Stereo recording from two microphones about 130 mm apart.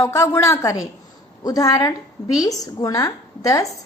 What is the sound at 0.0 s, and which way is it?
A woman's voice, 20° left (ahead or behind).